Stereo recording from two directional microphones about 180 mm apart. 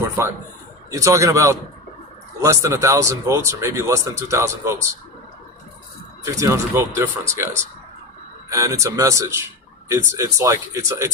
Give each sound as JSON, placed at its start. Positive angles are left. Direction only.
{"t": 0.2, "sound": "speech", "side_deg": -15}
{"t": 6.2, "sound": "speech", "side_deg": -15}